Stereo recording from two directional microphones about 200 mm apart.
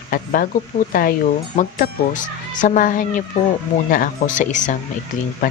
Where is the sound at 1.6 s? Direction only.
40° left (ahead or behind).